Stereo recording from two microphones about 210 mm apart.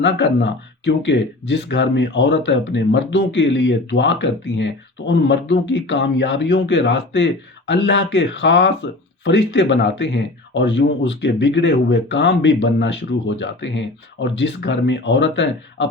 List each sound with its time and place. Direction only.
0.0 s speech: 55° left (ahead or behind)